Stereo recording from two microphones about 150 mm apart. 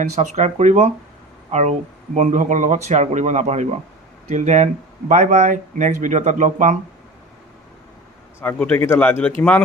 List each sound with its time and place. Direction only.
0.0 s speech: 50° right (ahead or behind)
8.4 s speech: 10° left (ahead or behind)